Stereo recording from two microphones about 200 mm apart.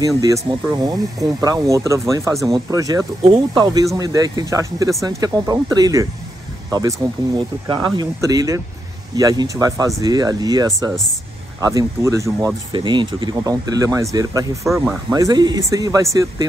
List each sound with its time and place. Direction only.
0.5 s speech: 25° right (ahead or behind)